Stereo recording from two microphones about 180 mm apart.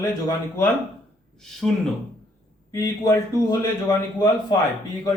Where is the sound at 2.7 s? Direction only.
15° left (ahead or behind).